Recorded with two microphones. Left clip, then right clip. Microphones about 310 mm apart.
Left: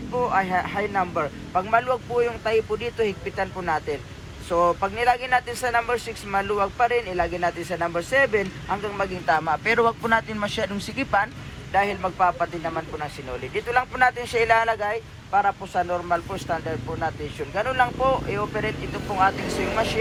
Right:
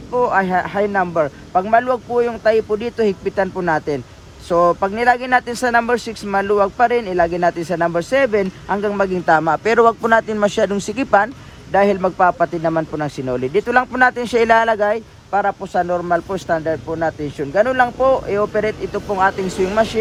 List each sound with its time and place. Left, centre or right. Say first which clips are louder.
0.2 s speech: right 6 dB; right
19.7 s speech: right 7 dB; right